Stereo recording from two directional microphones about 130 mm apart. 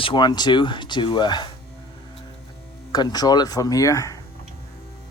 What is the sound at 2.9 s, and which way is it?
Speech, 30° left (ahead or behind).